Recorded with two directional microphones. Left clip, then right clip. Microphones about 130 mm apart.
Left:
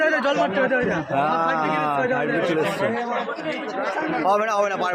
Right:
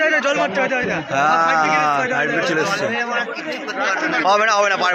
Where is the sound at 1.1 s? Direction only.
5° left (ahead or behind).